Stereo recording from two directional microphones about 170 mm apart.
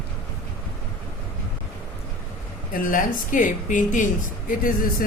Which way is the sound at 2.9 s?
50° left (ahead or behind).